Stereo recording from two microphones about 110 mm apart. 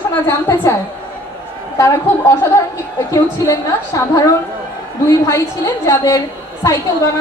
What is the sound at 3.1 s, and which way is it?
Speech, 30° left (ahead or behind).